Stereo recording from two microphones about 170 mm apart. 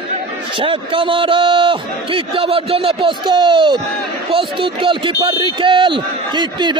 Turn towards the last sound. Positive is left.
turn(degrees=-25)  # may be behind; listen again after turning